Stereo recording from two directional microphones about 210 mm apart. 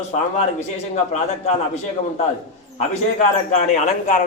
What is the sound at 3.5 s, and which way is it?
Speech, 35° left (ahead or behind).